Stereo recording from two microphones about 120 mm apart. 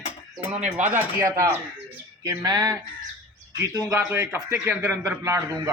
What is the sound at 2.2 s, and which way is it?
Speech, 35° right (ahead or behind).